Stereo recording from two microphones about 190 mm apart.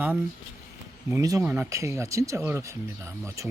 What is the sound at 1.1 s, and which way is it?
Speech, 20° right (ahead or behind).